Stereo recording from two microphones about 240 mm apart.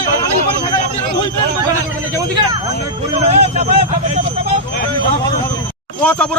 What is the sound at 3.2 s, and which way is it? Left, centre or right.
Speech, right.